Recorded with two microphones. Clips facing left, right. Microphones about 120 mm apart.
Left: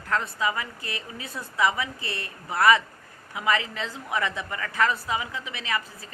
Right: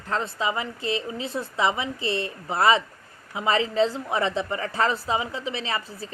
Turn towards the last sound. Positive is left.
turn(degrees=-30)  # may be behind; listen again after turning